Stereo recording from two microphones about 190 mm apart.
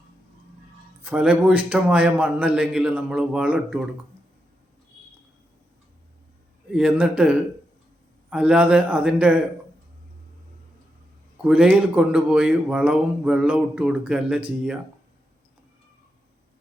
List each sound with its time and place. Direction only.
1.0 s a man's voice: 5° right (ahead or behind)
6.7 s speech: 5° right (ahead or behind)
11.4 s speech: 5° right (ahead or behind)